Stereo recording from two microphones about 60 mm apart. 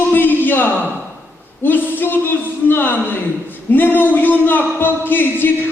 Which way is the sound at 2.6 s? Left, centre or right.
Left.